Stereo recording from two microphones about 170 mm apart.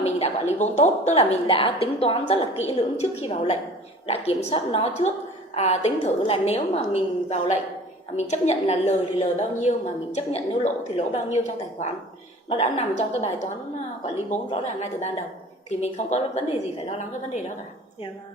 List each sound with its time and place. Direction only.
0.0 s a woman's voice: 40° left (ahead or behind)